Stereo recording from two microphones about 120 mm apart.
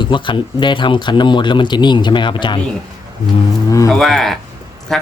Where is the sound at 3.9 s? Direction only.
5° left (ahead or behind).